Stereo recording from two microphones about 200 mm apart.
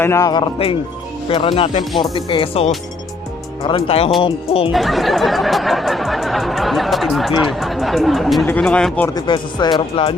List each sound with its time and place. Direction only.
0.0 s speech: 15° left (ahead or behind)
4.7 s speech: centre (ahead or behind)
9.1 s speech: 20° left (ahead or behind)